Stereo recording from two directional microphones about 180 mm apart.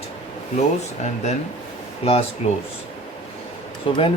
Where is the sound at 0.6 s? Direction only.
40° left (ahead or behind).